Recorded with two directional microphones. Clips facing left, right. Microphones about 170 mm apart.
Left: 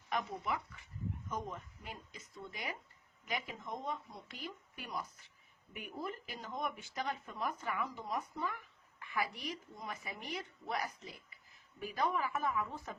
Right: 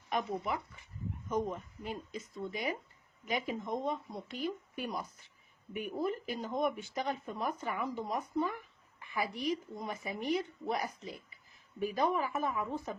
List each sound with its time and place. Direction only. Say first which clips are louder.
0.1 s speech: right 3 dB; 25° right (ahead or behind)